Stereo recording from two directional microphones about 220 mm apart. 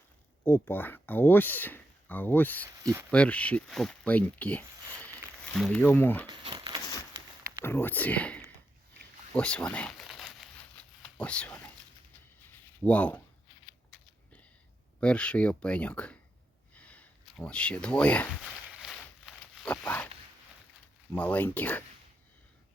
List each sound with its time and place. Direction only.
0.4 s speech: 10° left (ahead or behind)
2.8 s speech: 10° right (ahead or behind)
3.1 s speech: 5° left (ahead or behind)
6.2 s crumpling: 20° right (ahead or behind)
7.6 s speech: 10° left (ahead or behind)
9.3 s crumpling: 5° left (ahead or behind)
12.8 s speech: 5° left (ahead or behind)
15.0 s speech: 5° left (ahead or behind)
16.7 s a sound: 5° left (ahead or behind)
21.1 s speech: 10° left (ahead or behind)